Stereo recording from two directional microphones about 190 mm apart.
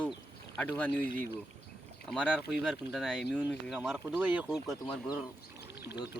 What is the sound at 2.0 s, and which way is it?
Speech, 5° left (ahead or behind).